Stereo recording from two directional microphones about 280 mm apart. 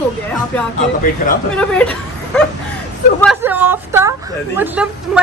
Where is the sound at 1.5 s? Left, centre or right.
Centre.